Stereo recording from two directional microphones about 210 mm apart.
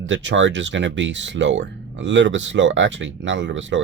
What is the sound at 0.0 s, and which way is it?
Speech, 65° right (ahead or behind).